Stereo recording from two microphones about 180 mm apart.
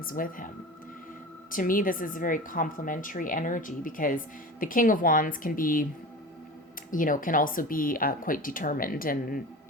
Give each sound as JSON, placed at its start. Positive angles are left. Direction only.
{"t": 0.0, "sound": "a woman's voice", "side_deg": 50}
{"t": 1.5, "sound": "a woman's voice", "side_deg": 50}
{"t": 6.9, "sound": "a woman's voice", "side_deg": 50}